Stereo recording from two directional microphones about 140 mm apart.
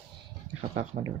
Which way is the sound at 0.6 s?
50° right (ahead or behind).